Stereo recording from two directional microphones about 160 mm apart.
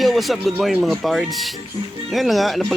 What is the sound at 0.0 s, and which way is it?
Speech, centre (ahead or behind).